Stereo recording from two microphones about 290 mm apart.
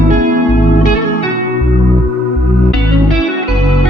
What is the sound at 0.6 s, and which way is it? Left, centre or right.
Music, left.